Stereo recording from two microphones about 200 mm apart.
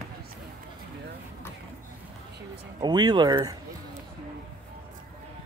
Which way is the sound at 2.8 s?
20° right (ahead or behind).